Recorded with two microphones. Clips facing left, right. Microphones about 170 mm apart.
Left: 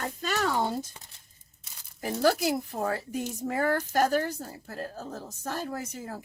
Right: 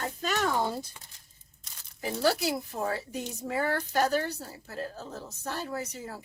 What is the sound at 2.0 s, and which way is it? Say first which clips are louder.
A woman's voice: left 2 dB; 45° left (ahead or behind).